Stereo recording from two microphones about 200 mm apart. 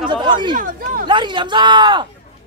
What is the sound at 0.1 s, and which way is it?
Chatter, 25° right (ahead or behind).